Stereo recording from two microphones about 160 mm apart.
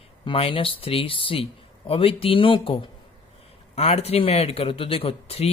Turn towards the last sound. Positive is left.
turn(degrees=40)  # may be behind; listen again after turning